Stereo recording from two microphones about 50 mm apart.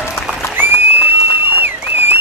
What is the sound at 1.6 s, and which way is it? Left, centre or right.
Applause, right.